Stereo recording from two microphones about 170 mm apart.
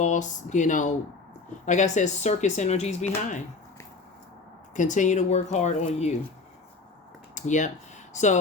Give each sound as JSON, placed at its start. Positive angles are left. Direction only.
{"t": 0.0, "sound": "speech", "side_deg": 45}
{"t": 4.7, "sound": "speech", "side_deg": 45}
{"t": 7.3, "sound": "speech", "side_deg": 45}